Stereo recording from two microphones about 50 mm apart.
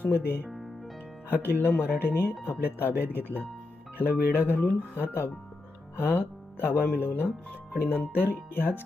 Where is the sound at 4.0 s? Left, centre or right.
Left.